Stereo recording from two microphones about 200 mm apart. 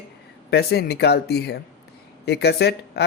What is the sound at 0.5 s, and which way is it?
Speech, 50° left (ahead or behind).